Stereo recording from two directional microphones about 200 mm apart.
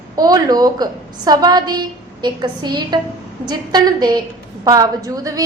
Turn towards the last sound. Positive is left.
turn(degrees=-15)  # may be behind; listen again after turning